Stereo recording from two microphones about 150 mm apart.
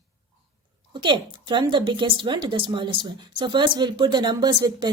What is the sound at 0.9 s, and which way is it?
A woman's voice, 30° right (ahead or behind).